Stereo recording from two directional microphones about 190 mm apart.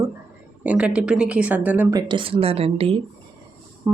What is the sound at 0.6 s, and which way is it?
Speech, 5° right (ahead or behind).